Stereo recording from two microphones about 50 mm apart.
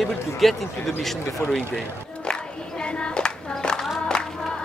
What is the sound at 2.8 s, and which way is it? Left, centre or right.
Hands, centre.